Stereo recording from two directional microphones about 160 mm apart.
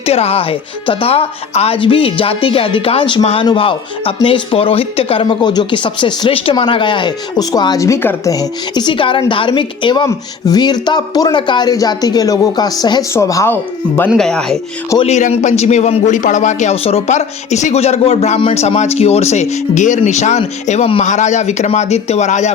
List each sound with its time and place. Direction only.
0.0 s speech: 40° left (ahead or behind); by 14.6 s 5° left (ahead or behind)
15.0 s a man's voice: 45° left (ahead or behind)